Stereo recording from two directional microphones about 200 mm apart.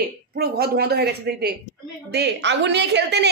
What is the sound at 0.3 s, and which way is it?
A woman's voice, 50° right (ahead or behind).